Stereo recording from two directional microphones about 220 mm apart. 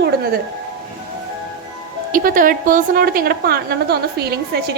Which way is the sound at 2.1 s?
40° right (ahead or behind).